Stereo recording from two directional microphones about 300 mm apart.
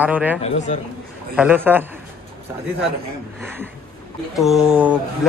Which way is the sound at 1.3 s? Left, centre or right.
Centre.